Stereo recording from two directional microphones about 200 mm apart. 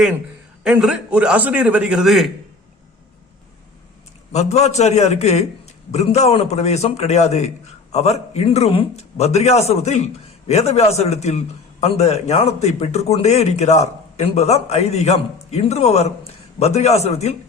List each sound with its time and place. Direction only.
0.6 s a man's voice: 5° right (ahead or behind)
4.3 s a man's voice: 35° left (ahead or behind)